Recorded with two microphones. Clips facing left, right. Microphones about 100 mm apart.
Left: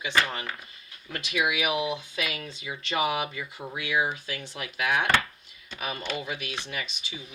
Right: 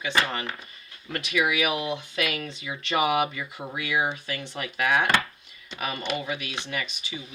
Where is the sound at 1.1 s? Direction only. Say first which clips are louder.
Right 2 dB; 55° right (ahead or behind).